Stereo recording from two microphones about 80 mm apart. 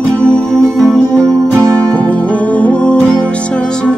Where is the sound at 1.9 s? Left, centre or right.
Centre.